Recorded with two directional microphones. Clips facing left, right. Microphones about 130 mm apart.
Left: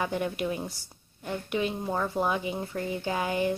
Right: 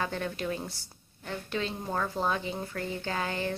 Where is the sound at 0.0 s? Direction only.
15° left (ahead or behind).